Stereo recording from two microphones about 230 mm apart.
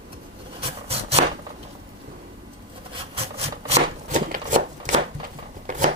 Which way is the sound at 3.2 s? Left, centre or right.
Right.